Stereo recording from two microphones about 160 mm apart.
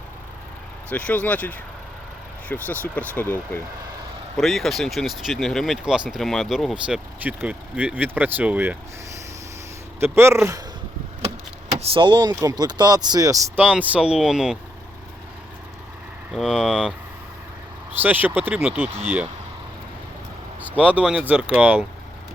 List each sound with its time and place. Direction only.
0.9 s speech: 10° left (ahead or behind)
4.4 s speech: centre (ahead or behind)
10.0 s speech: 15° right (ahead or behind)
11.8 s speech: 35° right (ahead or behind)
13.6 s speech: 10° right (ahead or behind)
16.3 s speech: centre (ahead or behind)
18.0 s speech: 10° right (ahead or behind)
20.9 s speech: 10° right (ahead or behind)